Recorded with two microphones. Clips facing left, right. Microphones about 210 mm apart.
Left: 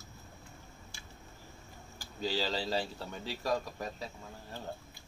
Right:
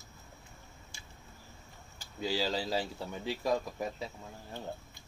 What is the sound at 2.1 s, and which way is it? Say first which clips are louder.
Speech: right 1 dB; 10° right (ahead or behind).